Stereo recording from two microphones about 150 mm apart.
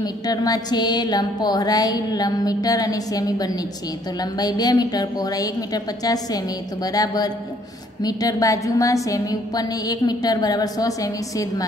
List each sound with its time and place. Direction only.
0.0 s a woman's voice: 25° left (ahead or behind)